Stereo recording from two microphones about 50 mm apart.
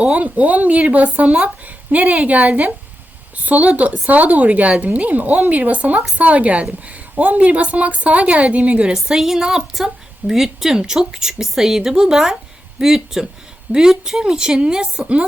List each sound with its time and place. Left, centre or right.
0.0 s a woman's voice: right